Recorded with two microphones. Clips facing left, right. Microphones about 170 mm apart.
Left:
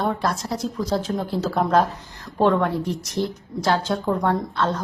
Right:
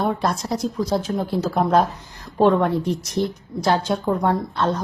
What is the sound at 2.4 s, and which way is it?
A woman's voice, 20° right (ahead or behind).